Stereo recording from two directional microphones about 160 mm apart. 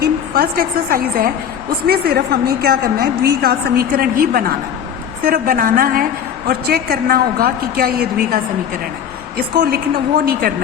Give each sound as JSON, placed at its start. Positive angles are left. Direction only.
{"t": 0.0, "sound": "a woman's voice", "side_deg": -65}
{"t": 1.9, "sound": "a woman's voice", "side_deg": -75}
{"t": 6.5, "sound": "a woman's voice", "side_deg": -75}
{"t": 9.6, "sound": "a woman's voice", "side_deg": -75}